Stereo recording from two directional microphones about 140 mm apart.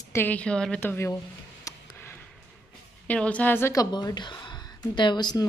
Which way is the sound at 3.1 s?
10° left (ahead or behind).